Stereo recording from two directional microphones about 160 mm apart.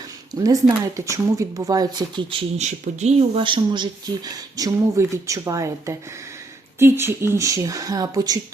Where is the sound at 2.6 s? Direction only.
45° right (ahead or behind).